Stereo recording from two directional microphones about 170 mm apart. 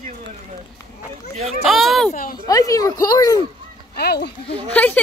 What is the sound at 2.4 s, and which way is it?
Speech, 20° left (ahead or behind).